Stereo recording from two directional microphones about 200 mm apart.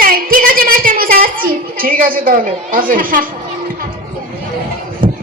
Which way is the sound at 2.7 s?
45° right (ahead or behind).